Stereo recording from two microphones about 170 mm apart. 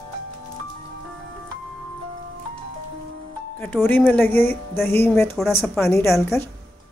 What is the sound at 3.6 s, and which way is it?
Speech, 10° left (ahead or behind).